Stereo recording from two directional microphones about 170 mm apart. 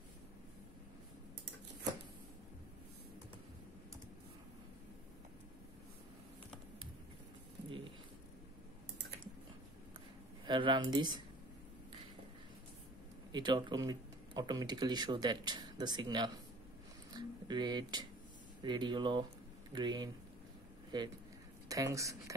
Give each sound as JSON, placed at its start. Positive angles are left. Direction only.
{"t": 10.4, "sound": "speech", "side_deg": -25}
{"t": 13.3, "sound": "speech", "side_deg": -25}
{"t": 17.1, "sound": "a sound", "side_deg": -25}
{"t": 18.6, "sound": "a woman's voice", "side_deg": -25}